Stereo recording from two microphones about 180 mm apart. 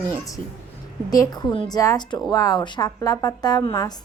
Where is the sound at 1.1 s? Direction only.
20° left (ahead or behind).